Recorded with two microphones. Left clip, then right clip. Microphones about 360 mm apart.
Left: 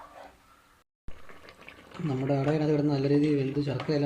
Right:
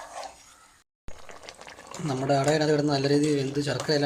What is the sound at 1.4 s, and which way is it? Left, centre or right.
Speech, right.